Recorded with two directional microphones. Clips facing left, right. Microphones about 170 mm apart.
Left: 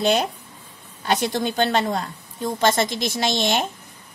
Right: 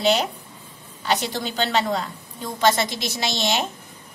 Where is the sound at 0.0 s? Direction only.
45° left (ahead or behind).